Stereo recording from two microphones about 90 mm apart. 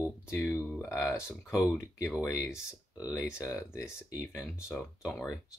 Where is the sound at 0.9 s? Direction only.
30° left (ahead or behind).